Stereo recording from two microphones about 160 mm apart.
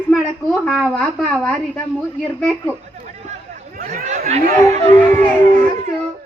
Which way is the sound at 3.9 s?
45° right (ahead or behind).